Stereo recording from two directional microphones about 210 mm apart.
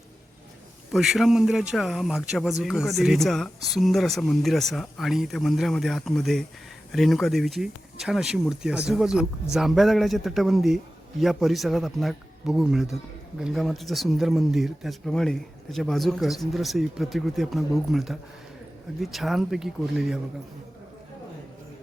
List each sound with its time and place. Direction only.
0.9 s speech: centre (ahead or behind)